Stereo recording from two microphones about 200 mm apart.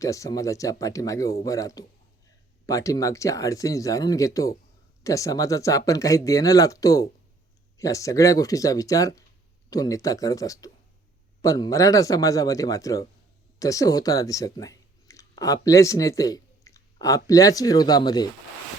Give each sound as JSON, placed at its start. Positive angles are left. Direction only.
{"t": 0.0, "sound": "speech", "side_deg": 15}